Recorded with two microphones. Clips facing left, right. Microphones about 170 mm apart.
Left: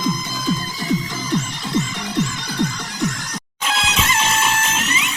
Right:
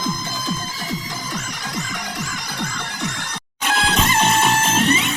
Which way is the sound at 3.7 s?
50° right (ahead or behind).